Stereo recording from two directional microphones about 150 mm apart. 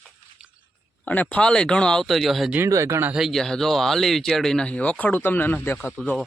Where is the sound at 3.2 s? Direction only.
Centre (ahead or behind).